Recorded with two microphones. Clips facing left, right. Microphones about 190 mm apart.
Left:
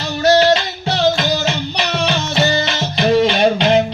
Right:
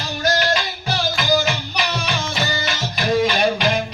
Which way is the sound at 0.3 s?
25° left (ahead or behind).